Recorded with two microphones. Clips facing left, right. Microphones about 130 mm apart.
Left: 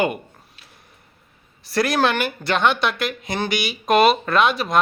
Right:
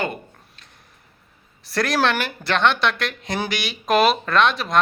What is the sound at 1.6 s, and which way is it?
Speech, centre (ahead or behind).